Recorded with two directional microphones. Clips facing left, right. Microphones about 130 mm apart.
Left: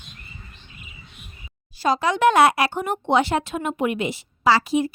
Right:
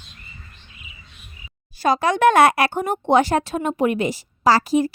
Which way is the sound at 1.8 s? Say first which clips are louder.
Right 2 dB; 55° right (ahead or behind).